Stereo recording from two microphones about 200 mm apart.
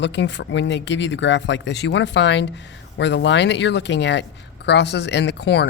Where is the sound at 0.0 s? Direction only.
60° left (ahead or behind).